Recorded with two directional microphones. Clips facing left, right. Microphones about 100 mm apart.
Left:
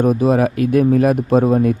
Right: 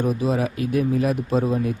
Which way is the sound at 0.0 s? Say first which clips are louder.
Left 8 dB; 55° left (ahead or behind).